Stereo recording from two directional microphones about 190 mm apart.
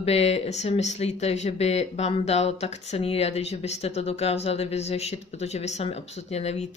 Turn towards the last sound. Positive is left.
turn(degrees=35)  # may be behind; listen again after turning